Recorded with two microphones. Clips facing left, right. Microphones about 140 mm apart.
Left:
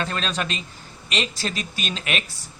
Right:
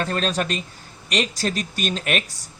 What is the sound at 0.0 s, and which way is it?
Speech, 45° right (ahead or behind).